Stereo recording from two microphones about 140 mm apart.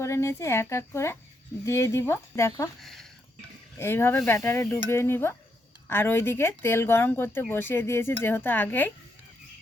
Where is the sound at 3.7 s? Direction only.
15° left (ahead or behind).